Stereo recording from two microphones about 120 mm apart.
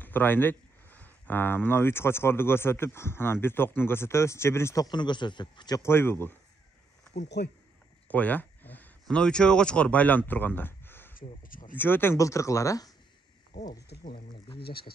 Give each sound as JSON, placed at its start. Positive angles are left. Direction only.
{"t": 0.0, "sound": "speech", "side_deg": 15}
{"t": 4.8, "sound": "a man's voice", "side_deg": 40}
{"t": 5.8, "sound": "speech", "side_deg": 20}
{"t": 8.1, "sound": "a sound", "side_deg": 15}
{"t": 9.0, "sound": "speech", "side_deg": 5}